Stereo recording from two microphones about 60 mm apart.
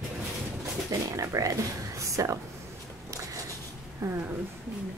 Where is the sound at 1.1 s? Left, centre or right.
Right.